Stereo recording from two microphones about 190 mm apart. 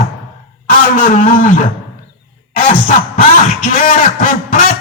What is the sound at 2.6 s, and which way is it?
Speech, 45° left (ahead or behind).